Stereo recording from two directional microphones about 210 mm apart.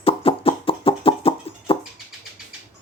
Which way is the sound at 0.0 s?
25° left (ahead or behind).